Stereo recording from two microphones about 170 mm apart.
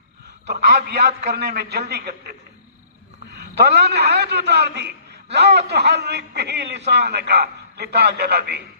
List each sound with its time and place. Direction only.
0.4 s a man's voice: 75° right (ahead or behind)
3.3 s a man's voice: 75° right (ahead or behind)